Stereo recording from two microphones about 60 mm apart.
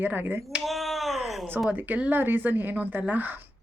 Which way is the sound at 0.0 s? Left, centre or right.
Right.